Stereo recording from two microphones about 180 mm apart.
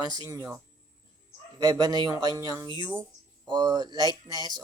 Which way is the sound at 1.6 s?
20° right (ahead or behind).